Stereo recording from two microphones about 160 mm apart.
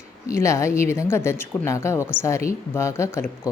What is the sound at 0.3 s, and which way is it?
Speech, 20° left (ahead or behind).